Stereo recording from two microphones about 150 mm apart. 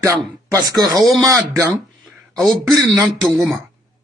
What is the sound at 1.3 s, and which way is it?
Speech, 20° right (ahead or behind).